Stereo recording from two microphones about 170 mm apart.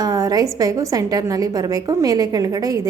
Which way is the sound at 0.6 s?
20° right (ahead or behind).